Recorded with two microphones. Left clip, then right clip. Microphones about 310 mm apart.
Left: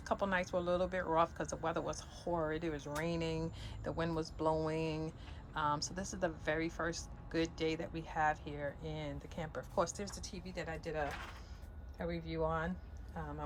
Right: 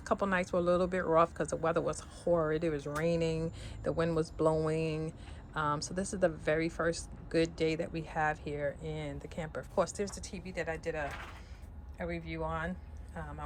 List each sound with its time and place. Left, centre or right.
0.0 s speech: centre
8.9 s speech: left
9.1 s speech: centre